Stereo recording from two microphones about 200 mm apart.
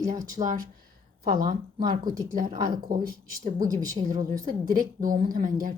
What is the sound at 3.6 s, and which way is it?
Speech, 20° right (ahead or behind).